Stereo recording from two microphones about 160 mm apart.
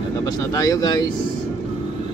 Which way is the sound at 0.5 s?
20° left (ahead or behind).